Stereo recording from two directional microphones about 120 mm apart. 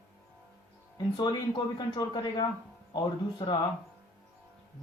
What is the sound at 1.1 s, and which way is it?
Speech, 35° left (ahead or behind).